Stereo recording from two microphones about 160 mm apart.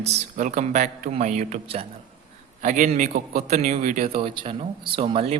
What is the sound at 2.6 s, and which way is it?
Speech, 55° right (ahead or behind).